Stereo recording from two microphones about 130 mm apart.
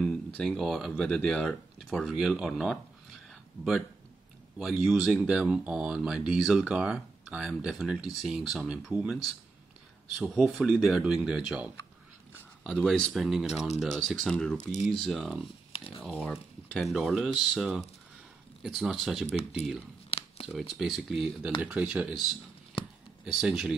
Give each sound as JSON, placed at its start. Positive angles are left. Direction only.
{"t": 0.0, "sound": "speech", "side_deg": 5}
{"t": 3.3, "sound": "a sound", "side_deg": 0}
{"t": 4.6, "sound": "speech", "side_deg": 0}
{"t": 12.7, "sound": "speech", "side_deg": 5}
{"t": 14.6, "sound": "speech", "side_deg": 65}
{"t": 14.9, "sound": "speech", "side_deg": 0}
{"t": 19.2, "sound": "speech", "side_deg": 55}
{"t": 20.1, "sound": "a sound", "side_deg": 50}
{"t": 20.4, "sound": "speech", "side_deg": 0}
{"t": 22.8, "sound": "a sound", "side_deg": 40}
{"t": 23.2, "sound": "speech", "side_deg": -5}